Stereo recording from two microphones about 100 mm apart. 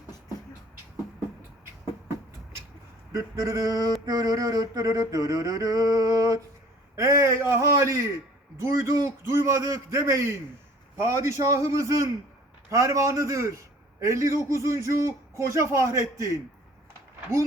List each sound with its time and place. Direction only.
3.1 s a man's voice: 35° right (ahead or behind)